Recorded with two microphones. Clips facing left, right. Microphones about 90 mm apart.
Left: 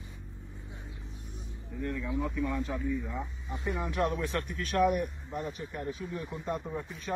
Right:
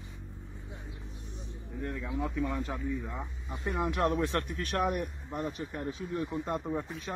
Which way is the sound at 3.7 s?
60° right (ahead or behind).